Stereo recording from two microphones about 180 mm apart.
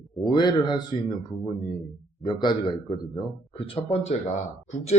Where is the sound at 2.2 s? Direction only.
25° left (ahead or behind).